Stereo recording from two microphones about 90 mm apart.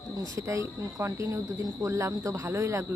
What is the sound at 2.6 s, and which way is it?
Speech, 35° right (ahead or behind).